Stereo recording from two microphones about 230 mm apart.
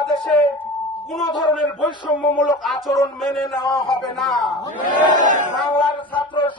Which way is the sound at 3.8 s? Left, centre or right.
Centre.